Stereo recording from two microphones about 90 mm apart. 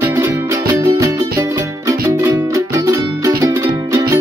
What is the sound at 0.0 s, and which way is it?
Music, 30° right (ahead or behind).